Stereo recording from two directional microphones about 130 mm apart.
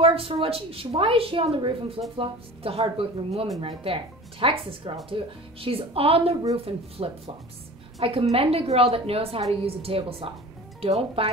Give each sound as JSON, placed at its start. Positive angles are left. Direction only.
{"t": 0.0, "sound": "a woman's voice", "side_deg": -45}